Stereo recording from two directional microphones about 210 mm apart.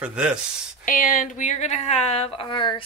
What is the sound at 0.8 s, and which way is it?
Speech, 40° left (ahead or behind).